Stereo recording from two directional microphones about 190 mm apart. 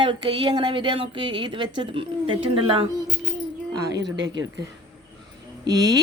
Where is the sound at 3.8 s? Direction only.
65° right (ahead or behind).